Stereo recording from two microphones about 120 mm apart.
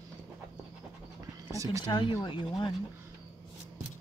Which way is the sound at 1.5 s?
25° right (ahead or behind).